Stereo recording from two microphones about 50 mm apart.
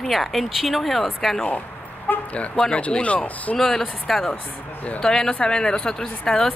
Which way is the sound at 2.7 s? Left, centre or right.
Left.